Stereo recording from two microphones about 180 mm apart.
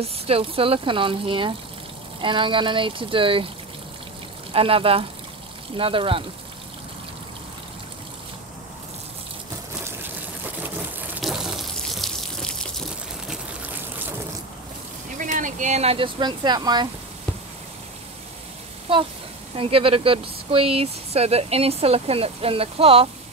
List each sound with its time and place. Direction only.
0.0 s speech: 30° right (ahead or behind)
4.5 s speech: 30° right (ahead or behind)
10.6 s water: 10° right (ahead or behind)
15.1 s speech: 45° right (ahead or behind); by 16.9 s 25° right (ahead or behind)
18.9 s speech: 30° right (ahead or behind)